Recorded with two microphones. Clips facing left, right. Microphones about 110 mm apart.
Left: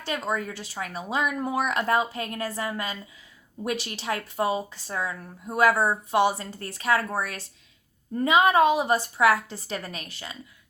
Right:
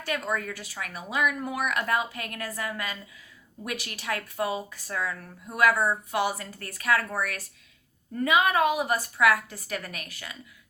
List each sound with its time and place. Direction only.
0.0 s speech: 20° left (ahead or behind)